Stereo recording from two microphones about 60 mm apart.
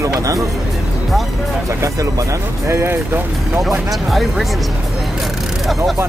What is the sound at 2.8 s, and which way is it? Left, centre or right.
Speech, right.